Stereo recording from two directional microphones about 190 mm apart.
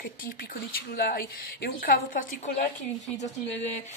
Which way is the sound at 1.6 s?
50° left (ahead or behind).